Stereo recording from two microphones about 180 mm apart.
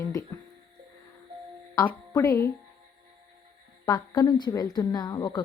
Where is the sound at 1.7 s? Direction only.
15° left (ahead or behind).